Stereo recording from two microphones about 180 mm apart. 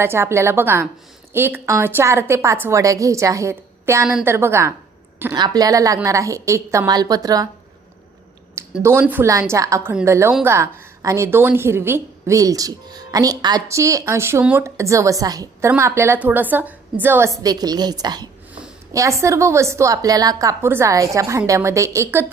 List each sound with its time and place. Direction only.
0.0 s a woman's voice: 15° right (ahead or behind)
8.7 s a woman's voice: 10° right (ahead or behind)